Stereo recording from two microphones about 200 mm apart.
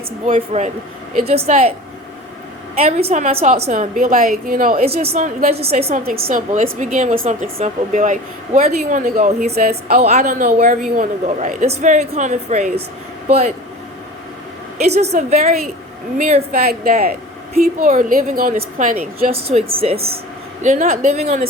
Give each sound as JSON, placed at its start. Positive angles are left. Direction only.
{"t": 0.3, "sound": "a woman's voice", "side_deg": -30}
{"t": 2.7, "sound": "a woman's voice", "side_deg": -30}
{"t": 5.1, "sound": "a woman's voice", "side_deg": -35}
{"t": 5.7, "sound": "a woman's voice", "side_deg": -35}
{"t": 10.0, "sound": "a woman's voice", "side_deg": -35}
{"t": 14.8, "sound": "a woman's voice", "side_deg": -35}
{"t": 16.6, "sound": "a woman's voice", "side_deg": -50}